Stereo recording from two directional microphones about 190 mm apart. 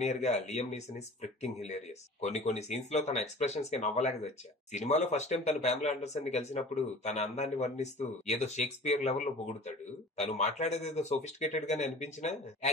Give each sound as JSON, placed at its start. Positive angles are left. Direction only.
{"t": 0.0, "sound": "speech", "side_deg": 35}